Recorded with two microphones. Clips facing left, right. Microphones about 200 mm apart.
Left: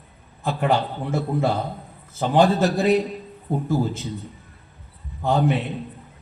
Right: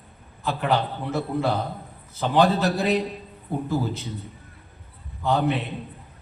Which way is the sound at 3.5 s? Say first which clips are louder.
Left 3 dB; 50° left (ahead or behind).